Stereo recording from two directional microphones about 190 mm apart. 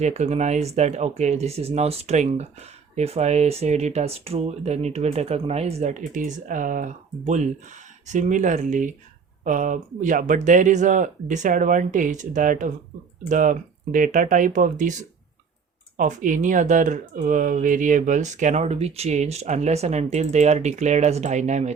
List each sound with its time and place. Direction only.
0.0 s speech: 35° right (ahead or behind)